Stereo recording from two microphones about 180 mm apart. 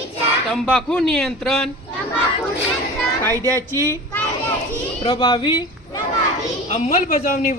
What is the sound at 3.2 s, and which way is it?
Speech, 15° left (ahead or behind).